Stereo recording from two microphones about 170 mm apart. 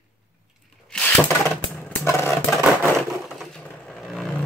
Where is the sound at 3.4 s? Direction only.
5° left (ahead or behind).